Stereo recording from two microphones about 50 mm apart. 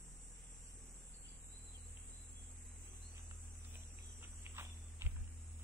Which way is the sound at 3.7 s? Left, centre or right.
Right.